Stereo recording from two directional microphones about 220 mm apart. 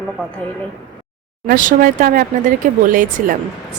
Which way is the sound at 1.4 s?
40° right (ahead or behind).